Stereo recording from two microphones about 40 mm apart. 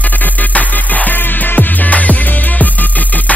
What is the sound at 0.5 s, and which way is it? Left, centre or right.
Music, left.